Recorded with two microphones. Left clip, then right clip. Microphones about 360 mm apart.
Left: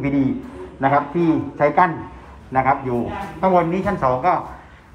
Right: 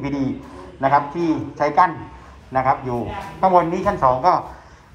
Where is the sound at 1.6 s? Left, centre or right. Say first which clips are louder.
Right 1 dB; centre.